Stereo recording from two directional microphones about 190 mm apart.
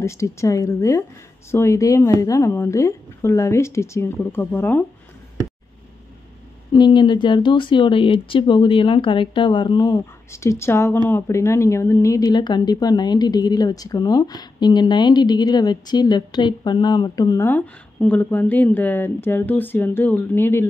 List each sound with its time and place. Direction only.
0.0 s a woman's voice: 15° left (ahead or behind)
6.7 s a woman's voice: 25° left (ahead or behind)